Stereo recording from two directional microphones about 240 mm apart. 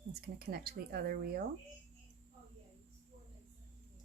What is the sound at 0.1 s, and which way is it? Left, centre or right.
Speech, right.